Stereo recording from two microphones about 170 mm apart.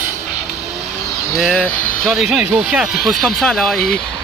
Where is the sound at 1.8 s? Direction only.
50° left (ahead or behind).